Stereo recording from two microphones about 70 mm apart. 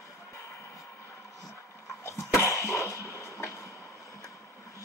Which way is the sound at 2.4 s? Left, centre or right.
Left.